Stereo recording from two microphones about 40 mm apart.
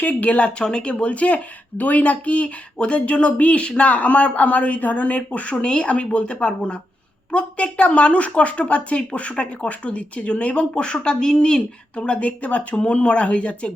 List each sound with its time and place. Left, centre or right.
0.0 s speech: left
0.6 s speech: left